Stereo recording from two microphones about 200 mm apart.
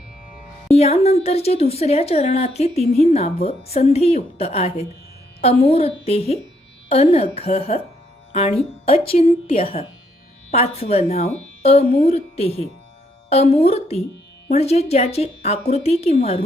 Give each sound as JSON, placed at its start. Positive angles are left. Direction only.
{"t": 0.7, "sound": "speech", "side_deg": 30}